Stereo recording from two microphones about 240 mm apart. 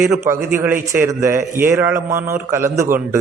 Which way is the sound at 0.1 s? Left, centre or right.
Centre.